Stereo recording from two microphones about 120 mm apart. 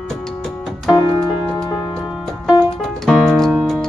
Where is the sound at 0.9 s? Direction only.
40° left (ahead or behind).